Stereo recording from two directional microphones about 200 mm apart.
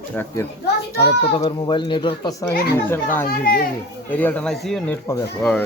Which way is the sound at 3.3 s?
50° left (ahead or behind).